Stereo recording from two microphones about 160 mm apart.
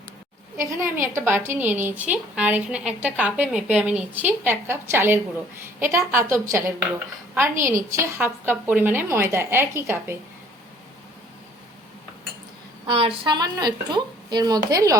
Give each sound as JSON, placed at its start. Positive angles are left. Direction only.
{"t": 0.6, "sound": "a woman's voice", "side_deg": -15}
{"t": 12.9, "sound": "speech", "side_deg": -30}